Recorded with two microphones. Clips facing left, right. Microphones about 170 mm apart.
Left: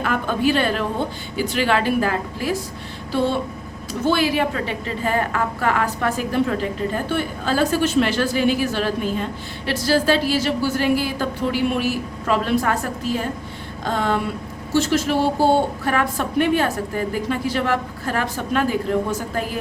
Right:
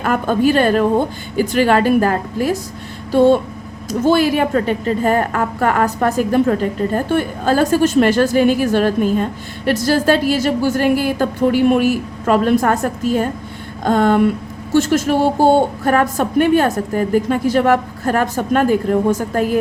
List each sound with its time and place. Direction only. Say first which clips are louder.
0.0 s a woman's voice: right 5 dB; 45° right (ahead or behind)
13.8 s a woman's voice: right 9 dB; 50° right (ahead or behind)